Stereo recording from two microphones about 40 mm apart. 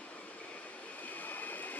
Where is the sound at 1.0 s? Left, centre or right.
Left.